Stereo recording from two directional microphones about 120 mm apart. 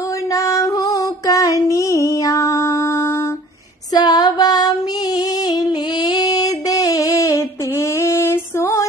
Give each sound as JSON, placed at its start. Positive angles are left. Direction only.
{"t": 0.3, "sound": "female singing", "side_deg": 30}